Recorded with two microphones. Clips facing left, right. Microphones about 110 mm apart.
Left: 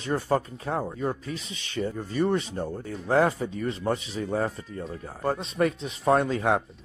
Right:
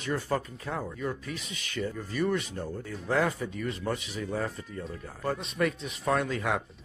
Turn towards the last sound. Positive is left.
turn(degrees=35)  # may be behind; listen again after turning